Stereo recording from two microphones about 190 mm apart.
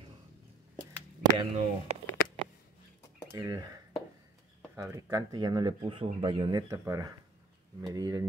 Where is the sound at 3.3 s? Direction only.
20° right (ahead or behind).